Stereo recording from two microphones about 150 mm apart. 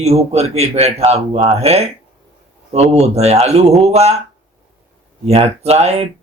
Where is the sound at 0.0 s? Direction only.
45° right (ahead or behind).